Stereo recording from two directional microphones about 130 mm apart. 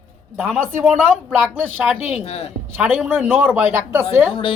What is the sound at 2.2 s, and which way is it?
Speech, 50° left (ahead or behind).